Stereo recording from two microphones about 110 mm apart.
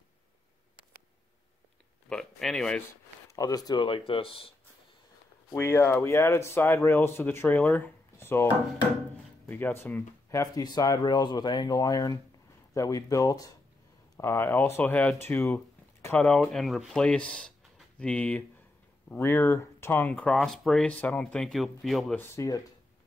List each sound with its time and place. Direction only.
2.0 s speech: 5° left (ahead or behind)
3.3 s speech: 30° left (ahead or behind); by 4.6 s 55° left (ahead or behind)
5.5 s speech: 25° left (ahead or behind)
9.5 s speech: 20° left (ahead or behind)
16.2 s speech: 10° left (ahead or behind)
19.0 s speech: 20° left (ahead or behind); by 22.1 s centre (ahead or behind)
22.1 s speech: 20° left (ahead or behind)